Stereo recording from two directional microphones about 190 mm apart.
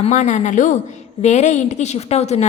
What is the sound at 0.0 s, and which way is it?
A woman's voice, 40° left (ahead or behind).